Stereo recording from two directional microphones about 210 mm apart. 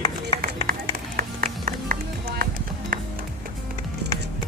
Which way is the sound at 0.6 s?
40° right (ahead or behind).